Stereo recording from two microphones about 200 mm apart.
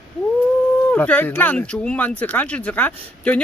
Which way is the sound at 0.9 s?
10° left (ahead or behind).